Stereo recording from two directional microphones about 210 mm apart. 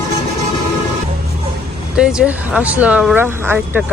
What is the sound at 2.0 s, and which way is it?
Speech, 5° right (ahead or behind).